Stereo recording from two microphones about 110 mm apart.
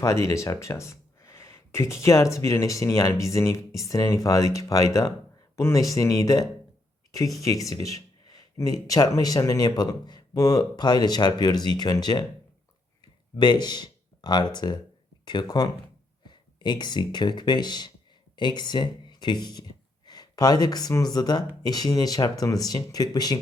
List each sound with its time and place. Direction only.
0.0 s speech: 30° left (ahead or behind)
13.3 s speech: 40° left (ahead or behind)